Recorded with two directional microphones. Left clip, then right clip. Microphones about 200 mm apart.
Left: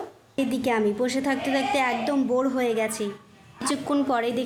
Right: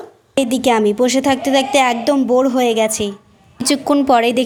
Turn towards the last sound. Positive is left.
turn(degrees=-35)  # may be behind; listen again after turning